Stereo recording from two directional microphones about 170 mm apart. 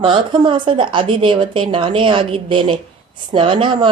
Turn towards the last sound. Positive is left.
turn(degrees=-30)  # may be behind; listen again after turning